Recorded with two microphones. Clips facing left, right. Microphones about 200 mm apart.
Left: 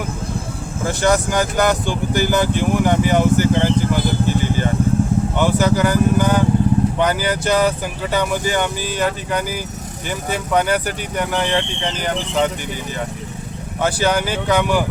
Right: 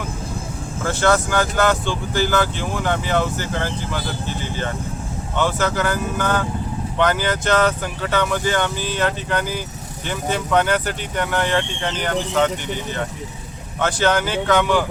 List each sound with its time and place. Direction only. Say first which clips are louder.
0.9 s speech: left 1 dB; 15° left (ahead or behind)
13.8 s speech: left 1 dB; 10° left (ahead or behind)